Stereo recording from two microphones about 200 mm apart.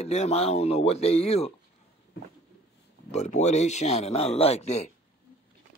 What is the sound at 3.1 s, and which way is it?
Speech, 35° left (ahead or behind).